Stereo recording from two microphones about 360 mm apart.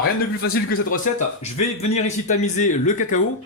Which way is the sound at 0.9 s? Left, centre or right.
Centre.